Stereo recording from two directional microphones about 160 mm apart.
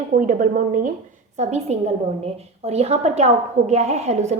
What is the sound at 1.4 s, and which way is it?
A woman's voice, 45° right (ahead or behind).